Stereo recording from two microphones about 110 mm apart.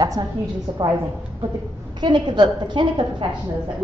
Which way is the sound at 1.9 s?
40° right (ahead or behind).